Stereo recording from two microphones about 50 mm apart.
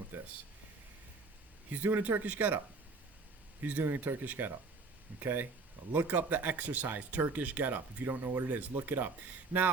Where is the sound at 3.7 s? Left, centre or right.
Right.